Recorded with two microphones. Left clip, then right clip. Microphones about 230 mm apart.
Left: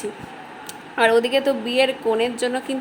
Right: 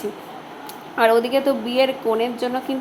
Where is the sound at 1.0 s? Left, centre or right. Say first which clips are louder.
Even; centre.